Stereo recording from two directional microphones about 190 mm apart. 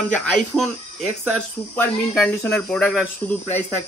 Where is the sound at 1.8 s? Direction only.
10° left (ahead or behind).